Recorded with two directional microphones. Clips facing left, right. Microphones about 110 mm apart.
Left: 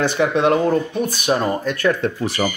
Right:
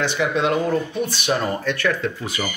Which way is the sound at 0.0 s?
50° left (ahead or behind).